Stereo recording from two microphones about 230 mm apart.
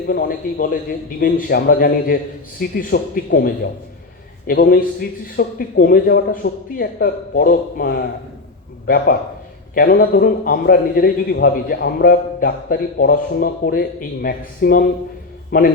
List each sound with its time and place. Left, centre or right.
0.1 s a man's voice: left
9.7 s a man's voice: left